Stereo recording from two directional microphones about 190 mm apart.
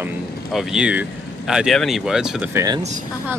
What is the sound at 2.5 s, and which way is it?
Speech, 20° right (ahead or behind).